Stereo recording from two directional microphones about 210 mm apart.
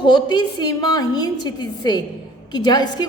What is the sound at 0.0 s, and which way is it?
A woman's voice, 20° left (ahead or behind).